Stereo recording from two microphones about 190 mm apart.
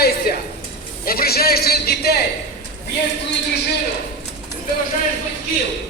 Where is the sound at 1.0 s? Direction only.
55° left (ahead or behind).